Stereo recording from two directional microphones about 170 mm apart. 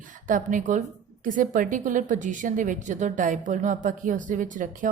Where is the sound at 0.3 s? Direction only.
50° right (ahead or behind).